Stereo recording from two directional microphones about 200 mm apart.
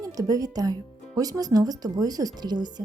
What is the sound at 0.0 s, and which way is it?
Speech, 20° right (ahead or behind).